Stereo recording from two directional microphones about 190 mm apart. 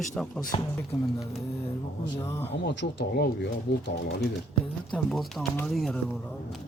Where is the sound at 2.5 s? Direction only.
65° left (ahead or behind).